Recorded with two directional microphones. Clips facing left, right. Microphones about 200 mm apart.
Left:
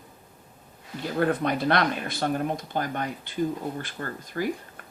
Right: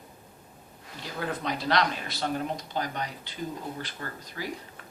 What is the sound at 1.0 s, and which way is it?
Speech, 55° left (ahead or behind).